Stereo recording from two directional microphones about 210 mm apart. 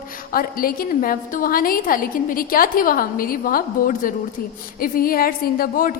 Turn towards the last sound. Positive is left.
turn(degrees=40)  # may be behind; listen again after turning